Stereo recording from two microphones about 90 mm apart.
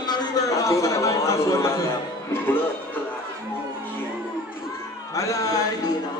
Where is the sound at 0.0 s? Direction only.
50° left (ahead or behind).